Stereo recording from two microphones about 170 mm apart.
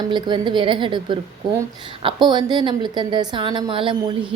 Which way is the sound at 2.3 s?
25° right (ahead or behind).